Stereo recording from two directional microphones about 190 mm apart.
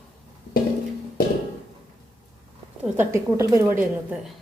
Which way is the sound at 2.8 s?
10° right (ahead or behind).